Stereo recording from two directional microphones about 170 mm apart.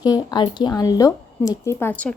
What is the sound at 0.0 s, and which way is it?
A woman's voice, 25° left (ahead or behind).